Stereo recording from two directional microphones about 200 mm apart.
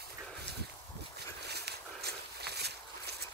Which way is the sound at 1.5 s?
55° right (ahead or behind).